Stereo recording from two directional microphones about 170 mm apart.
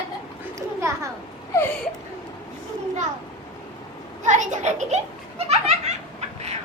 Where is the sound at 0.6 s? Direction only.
20° right (ahead or behind).